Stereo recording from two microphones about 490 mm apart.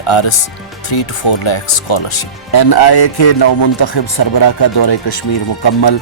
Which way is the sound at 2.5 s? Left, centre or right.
Left.